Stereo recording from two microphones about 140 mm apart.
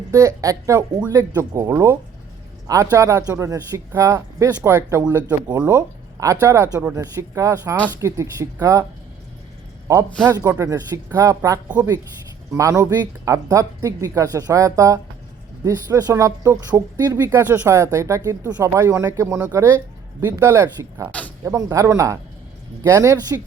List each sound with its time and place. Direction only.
0.1 s speech: 20° right (ahead or behind)
9.9 s speech: 20° right (ahead or behind)
21.1 s a sound: 10° left (ahead or behind)
21.4 s speech: 20° right (ahead or behind)